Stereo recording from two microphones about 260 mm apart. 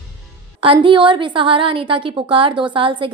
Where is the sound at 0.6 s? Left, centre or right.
Centre.